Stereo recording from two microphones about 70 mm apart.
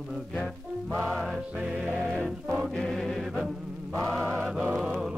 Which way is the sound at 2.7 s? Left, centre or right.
Centre.